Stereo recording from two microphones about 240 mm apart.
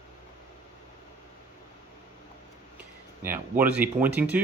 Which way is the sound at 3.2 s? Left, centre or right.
Centre.